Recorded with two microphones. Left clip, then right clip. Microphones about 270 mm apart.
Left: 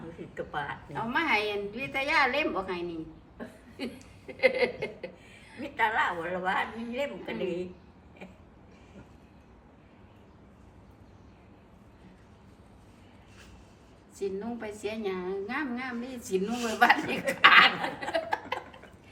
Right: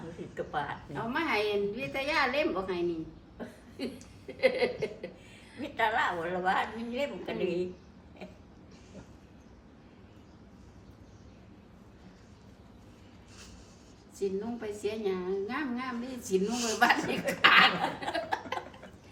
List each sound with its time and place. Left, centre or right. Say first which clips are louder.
0.2 s a woman's voice: right 1 dB; centre
14.2 s a woman's voice: even; centre